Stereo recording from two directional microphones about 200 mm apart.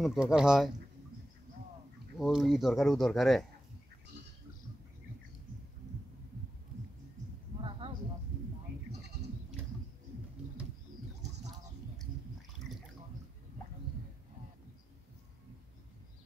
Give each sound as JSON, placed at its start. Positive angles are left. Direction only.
{"t": 0.0, "sound": "speech", "side_deg": 0}
{"t": 2.1, "sound": "speech", "side_deg": 0}
{"t": 7.8, "sound": "a sound", "side_deg": -25}